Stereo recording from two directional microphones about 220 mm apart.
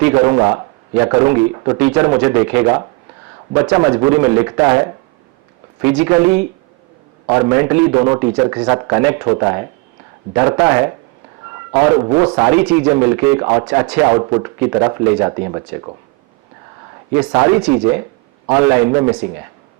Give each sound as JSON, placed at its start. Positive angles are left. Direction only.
{"t": 0.0, "sound": "a man's voice", "side_deg": -10}
{"t": 13.9, "sound": "a man's voice", "side_deg": -10}
{"t": 14.2, "sound": "a man's voice", "side_deg": -20}
{"t": 17.4, "sound": "a man's voice", "side_deg": -10}